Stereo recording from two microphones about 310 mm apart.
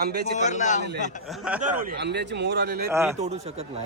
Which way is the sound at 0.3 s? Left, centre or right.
Left.